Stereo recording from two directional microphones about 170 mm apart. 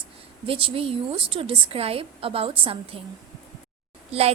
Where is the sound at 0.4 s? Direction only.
35° right (ahead or behind).